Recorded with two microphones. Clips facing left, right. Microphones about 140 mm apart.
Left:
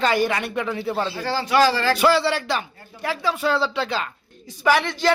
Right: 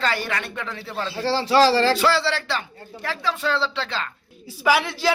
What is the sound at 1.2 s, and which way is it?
Speech, 30° right (ahead or behind).